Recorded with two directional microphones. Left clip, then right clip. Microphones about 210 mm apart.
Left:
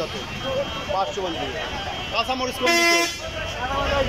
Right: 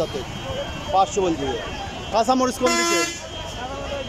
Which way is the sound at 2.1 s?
25° right (ahead or behind).